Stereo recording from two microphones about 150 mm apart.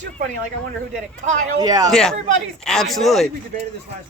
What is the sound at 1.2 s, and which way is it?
Speech, 55° right (ahead or behind).